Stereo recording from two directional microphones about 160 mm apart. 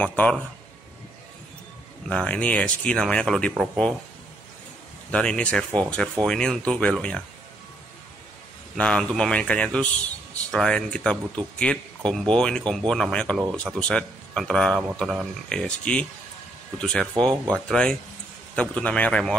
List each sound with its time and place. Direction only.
0.0 s speech: 10° left (ahead or behind)
2.0 s speech: 5° left (ahead or behind)
5.1 s speech: 5° left (ahead or behind)
8.7 s speech: 5° left (ahead or behind)